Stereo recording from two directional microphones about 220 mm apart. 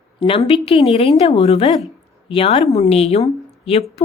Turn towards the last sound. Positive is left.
turn(degrees=25)  # may be behind; listen again after turning